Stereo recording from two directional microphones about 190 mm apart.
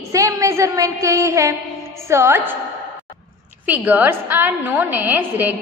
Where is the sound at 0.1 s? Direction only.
15° right (ahead or behind).